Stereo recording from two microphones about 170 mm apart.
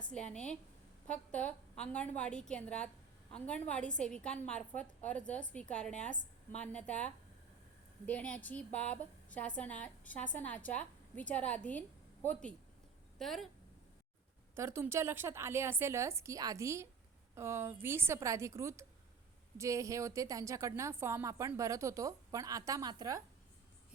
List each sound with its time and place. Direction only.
0.1 s a woman's voice: 5° left (ahead or behind)
14.5 s a woman's voice: 15° right (ahead or behind)